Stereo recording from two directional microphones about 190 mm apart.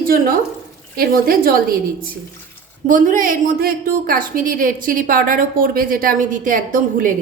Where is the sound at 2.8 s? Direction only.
45° right (ahead or behind).